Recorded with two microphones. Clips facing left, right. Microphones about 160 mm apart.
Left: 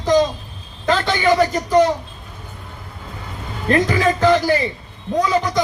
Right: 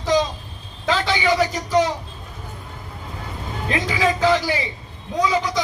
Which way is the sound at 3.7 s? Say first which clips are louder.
Left 5 dB; 50° left (ahead or behind).